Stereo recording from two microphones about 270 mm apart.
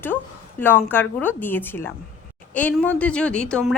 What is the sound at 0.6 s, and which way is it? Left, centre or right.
A woman's voice, centre.